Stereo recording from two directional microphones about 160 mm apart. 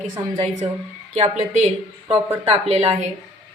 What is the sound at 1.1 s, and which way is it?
A woman's voice, 45° right (ahead or behind).